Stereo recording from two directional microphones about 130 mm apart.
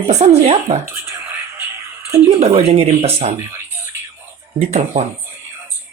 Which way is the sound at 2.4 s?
50° right (ahead or behind).